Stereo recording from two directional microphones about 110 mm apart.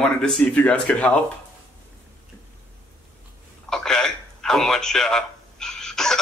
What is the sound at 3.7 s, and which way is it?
A man's voice, 5° left (ahead or behind).